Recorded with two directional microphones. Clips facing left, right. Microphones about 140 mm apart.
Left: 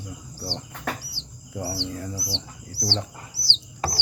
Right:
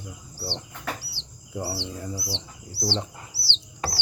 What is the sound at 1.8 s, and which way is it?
Speech, 10° right (ahead or behind).